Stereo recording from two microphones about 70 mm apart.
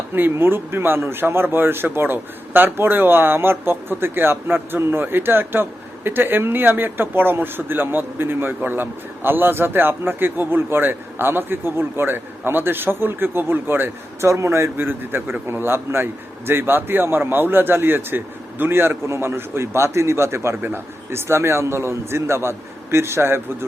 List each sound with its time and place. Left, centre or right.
0.1 s a man's voice: right
14.3 s a man's voice: right
14.8 s a man's voice: right